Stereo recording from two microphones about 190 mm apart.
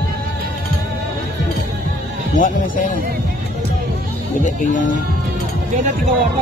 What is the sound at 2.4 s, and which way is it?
Speech, 45° left (ahead or behind).